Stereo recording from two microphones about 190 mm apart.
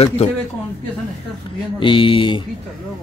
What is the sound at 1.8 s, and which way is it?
Speech, 25° left (ahead or behind).